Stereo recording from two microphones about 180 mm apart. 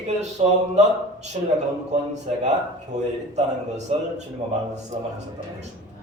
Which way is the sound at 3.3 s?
40° right (ahead or behind).